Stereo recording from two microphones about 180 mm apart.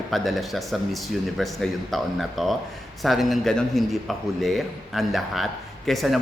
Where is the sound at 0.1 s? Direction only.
Centre (ahead or behind).